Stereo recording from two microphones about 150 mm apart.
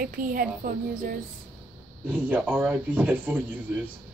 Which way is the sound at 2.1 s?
10° right (ahead or behind).